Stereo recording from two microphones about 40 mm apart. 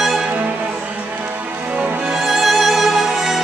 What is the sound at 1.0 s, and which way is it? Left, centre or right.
Music, right.